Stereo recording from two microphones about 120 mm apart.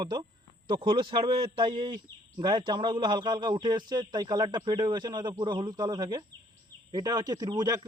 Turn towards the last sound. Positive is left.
turn(degrees=-30)  # may be behind; listen again after turning